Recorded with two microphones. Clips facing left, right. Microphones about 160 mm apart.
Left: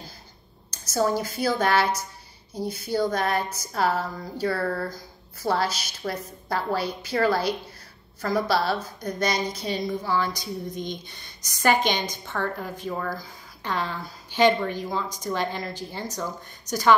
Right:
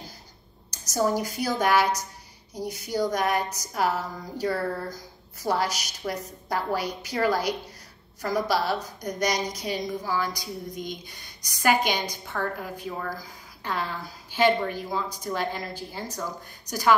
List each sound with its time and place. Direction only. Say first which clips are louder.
0.7 s a woman's voice: left 1 dB; 15° right (ahead or behind)